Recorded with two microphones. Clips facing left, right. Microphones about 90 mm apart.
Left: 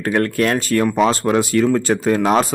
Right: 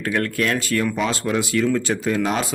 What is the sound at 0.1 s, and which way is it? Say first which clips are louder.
Speech: left 5 dB; 40° left (ahead or behind).